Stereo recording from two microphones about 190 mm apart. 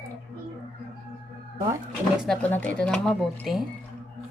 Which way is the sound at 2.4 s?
10° left (ahead or behind).